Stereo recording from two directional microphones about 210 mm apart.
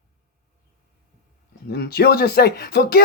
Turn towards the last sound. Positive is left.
turn(degrees=45)  # may be behind; listen again after turning